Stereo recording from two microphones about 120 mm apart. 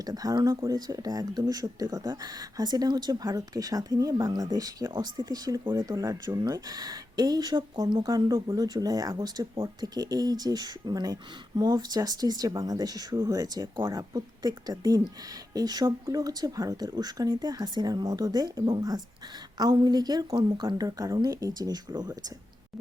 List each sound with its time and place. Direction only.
0.0 s speech: 30° right (ahead or behind)